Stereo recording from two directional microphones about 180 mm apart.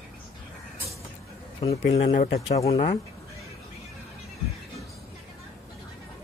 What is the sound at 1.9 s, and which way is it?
Speech, 40° left (ahead or behind).